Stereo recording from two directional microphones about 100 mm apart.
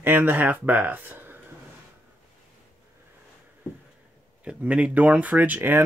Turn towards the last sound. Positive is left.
turn(degrees=-20)  # may be behind; listen again after turning